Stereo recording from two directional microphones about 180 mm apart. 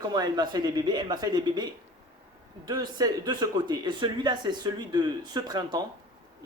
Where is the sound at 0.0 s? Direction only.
20° right (ahead or behind).